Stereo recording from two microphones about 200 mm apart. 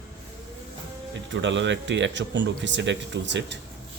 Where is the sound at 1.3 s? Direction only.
65° right (ahead or behind).